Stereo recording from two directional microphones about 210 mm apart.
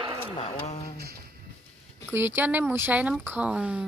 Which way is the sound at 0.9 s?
50° right (ahead or behind).